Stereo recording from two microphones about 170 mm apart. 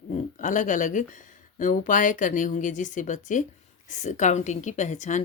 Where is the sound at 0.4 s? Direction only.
45° left (ahead or behind).